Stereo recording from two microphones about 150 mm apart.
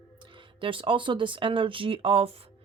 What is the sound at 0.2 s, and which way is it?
Speech, 35° right (ahead or behind).